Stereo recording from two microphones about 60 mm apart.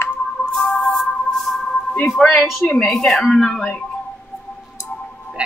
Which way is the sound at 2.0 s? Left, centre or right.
Centre.